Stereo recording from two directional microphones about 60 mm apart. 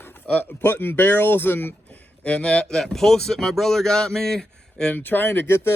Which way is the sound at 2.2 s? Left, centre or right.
Centre.